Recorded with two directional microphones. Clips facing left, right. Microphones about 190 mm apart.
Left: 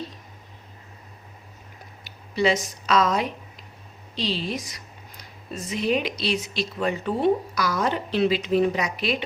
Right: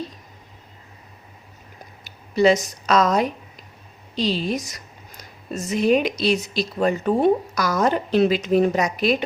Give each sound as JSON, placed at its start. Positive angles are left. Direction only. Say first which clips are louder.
{"t": 2.0, "sound": "speech", "louder": "right 6 dB", "side_deg": -45}